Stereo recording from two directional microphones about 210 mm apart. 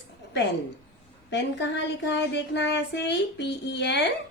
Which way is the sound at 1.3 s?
55° left (ahead or behind).